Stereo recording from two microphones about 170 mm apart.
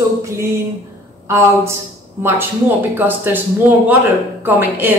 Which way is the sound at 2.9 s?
10° right (ahead or behind).